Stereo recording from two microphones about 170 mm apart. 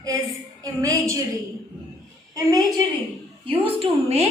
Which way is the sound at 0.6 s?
20° right (ahead or behind).